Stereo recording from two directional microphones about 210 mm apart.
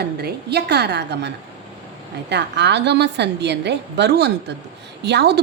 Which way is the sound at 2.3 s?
55° right (ahead or behind).